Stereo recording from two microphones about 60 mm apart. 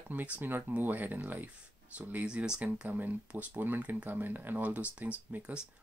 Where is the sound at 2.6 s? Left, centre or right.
Right.